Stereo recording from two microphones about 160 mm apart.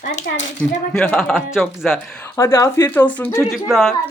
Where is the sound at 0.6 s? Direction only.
10° left (ahead or behind).